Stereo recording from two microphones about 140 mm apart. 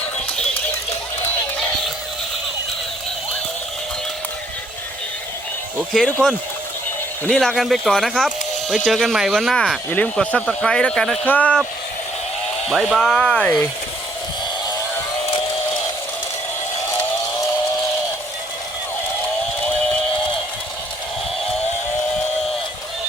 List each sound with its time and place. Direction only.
5.9 s speech: 5° left (ahead or behind)
12.6 s speech: centre (ahead or behind)
15.3 s a sound: 40° left (ahead or behind)